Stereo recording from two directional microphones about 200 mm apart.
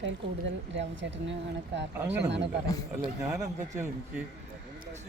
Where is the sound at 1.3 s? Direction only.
60° right (ahead or behind).